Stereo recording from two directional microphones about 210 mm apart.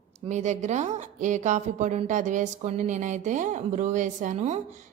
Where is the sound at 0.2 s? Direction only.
35° right (ahead or behind).